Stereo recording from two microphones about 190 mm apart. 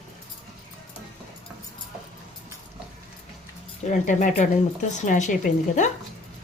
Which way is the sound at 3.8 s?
40° left (ahead or behind).